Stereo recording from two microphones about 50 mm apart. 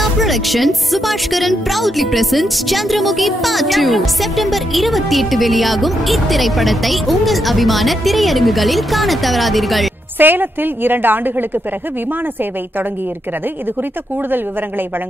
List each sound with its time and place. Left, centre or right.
0.0 s speech: centre
10.1 s a woman's voice: right